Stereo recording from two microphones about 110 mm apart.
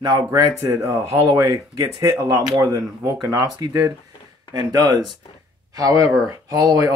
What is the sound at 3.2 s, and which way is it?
Speech, 35° right (ahead or behind).